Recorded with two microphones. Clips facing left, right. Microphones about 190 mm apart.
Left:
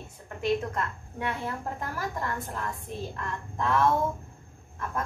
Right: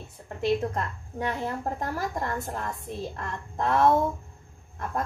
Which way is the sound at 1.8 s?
40° right (ahead or behind).